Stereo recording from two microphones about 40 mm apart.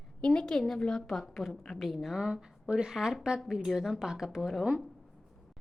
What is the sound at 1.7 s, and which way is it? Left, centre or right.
A woman's voice, centre.